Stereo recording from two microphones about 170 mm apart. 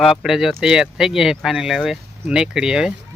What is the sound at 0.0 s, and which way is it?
Speech, centre (ahead or behind).